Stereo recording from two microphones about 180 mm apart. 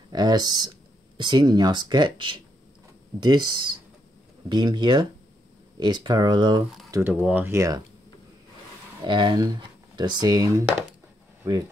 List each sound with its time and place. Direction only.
0.1 s speech: 20° right (ahead or behind)
6.9 s speech: 10° right (ahead or behind)
9.0 s speech: 25° right (ahead or behind)